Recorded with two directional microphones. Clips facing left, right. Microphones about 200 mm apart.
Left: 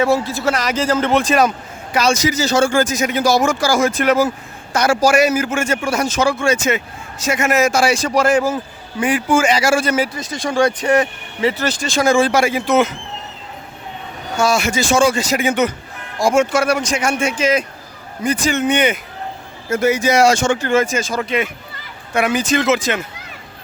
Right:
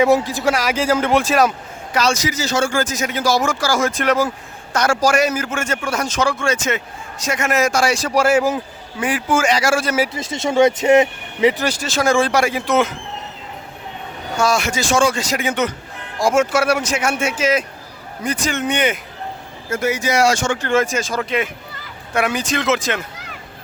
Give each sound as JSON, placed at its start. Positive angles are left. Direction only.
{"t": 0.0, "sound": "speech", "side_deg": -15}
{"t": 1.9, "sound": "a man's voice", "side_deg": 10}
{"t": 2.2, "sound": "speech", "side_deg": 30}
{"t": 2.7, "sound": "a man's voice", "side_deg": 15}
{"t": 8.0, "sound": "speech", "side_deg": -5}
{"t": 10.1, "sound": "speech", "side_deg": -25}
{"t": 14.3, "sound": "speech", "side_deg": 0}
{"t": 19.8, "sound": "speech", "side_deg": 25}
{"t": 20.6, "sound": "speech", "side_deg": 5}